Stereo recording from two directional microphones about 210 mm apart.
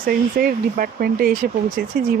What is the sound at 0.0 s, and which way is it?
Speech, 45° right (ahead or behind).